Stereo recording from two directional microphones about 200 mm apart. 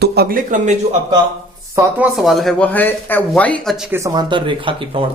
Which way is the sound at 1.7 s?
15° right (ahead or behind).